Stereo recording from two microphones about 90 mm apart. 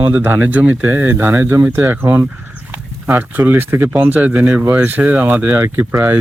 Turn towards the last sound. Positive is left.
turn(degrees=-25)  # may be behind; listen again after turning